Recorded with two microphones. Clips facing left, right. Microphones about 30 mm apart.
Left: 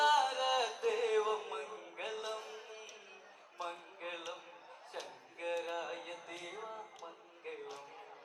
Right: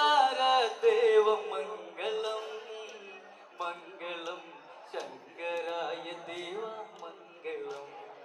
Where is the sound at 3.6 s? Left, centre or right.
Right.